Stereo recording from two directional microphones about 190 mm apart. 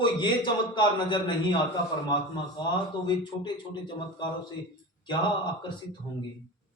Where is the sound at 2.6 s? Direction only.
25° left (ahead or behind).